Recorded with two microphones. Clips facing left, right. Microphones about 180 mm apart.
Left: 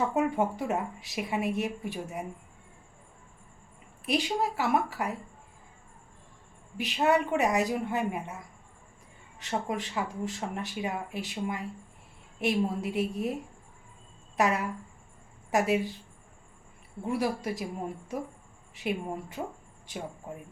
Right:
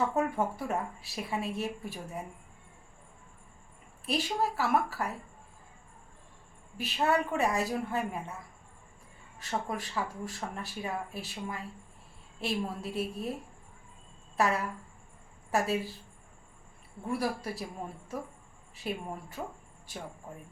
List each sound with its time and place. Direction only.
0.1 s speech: 20° left (ahead or behind)
4.0 s speech: 15° left (ahead or behind)
6.7 s speech: 15° left (ahead or behind)
9.4 s speech: 20° left (ahead or behind)
14.3 s a woman's voice: 15° left (ahead or behind)
17.1 s speech: 15° left (ahead or behind)
18.7 s speech: 15° left (ahead or behind)